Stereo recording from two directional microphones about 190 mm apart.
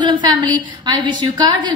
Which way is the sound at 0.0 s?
20° right (ahead or behind).